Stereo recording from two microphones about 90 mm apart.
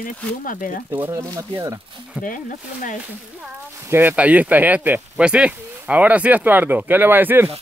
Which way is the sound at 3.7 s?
30° right (ahead or behind).